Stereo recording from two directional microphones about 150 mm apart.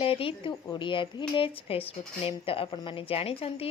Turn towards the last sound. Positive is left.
turn(degrees=40)  # may be behind; listen again after turning